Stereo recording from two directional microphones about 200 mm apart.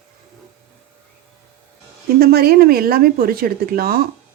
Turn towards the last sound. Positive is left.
turn(degrees=-50)  # may be behind; listen again after turning